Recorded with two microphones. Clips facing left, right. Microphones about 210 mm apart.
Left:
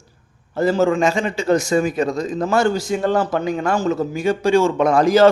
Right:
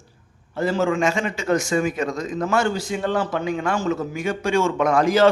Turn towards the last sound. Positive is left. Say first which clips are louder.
# left 4 dB
turn(degrees=40)  # may be behind; listen again after turning